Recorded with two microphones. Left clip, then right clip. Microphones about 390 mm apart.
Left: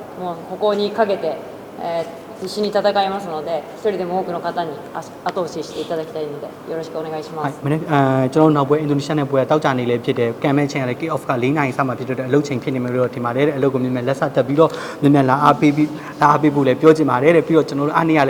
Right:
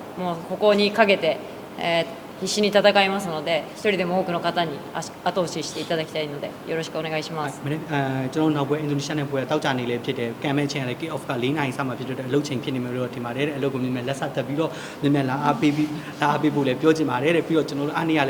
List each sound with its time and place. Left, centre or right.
0.7 s a woman's voice: right
7.4 s speech: left